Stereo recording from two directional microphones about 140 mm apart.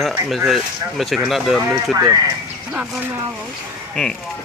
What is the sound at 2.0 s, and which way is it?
Speech, 25° right (ahead or behind).